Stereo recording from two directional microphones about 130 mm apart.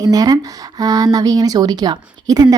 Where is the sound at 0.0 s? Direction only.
30° right (ahead or behind).